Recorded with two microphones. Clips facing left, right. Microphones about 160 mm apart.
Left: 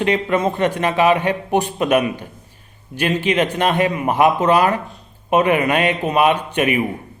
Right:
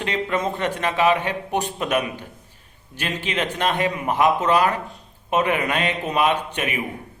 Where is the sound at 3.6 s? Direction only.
60° left (ahead or behind).